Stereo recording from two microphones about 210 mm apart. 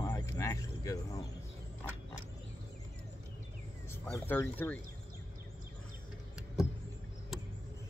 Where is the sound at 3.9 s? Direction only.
10° left (ahead or behind).